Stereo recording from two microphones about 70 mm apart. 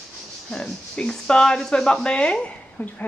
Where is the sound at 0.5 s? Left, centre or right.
Centre.